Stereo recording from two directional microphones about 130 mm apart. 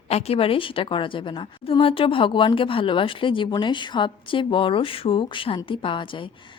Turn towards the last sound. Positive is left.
turn(degrees=40)  # may be behind; listen again after turning